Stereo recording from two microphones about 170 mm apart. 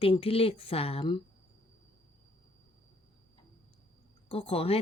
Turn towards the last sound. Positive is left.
turn(degrees=35)  # may be behind; listen again after turning